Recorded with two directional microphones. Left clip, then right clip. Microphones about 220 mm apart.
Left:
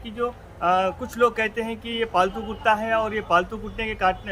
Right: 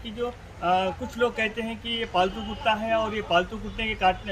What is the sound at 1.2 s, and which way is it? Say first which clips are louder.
Speech: left 4 dB; 5° left (ahead or behind).